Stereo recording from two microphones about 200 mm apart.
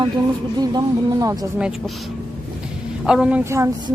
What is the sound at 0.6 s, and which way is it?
Speech, 20° right (ahead or behind).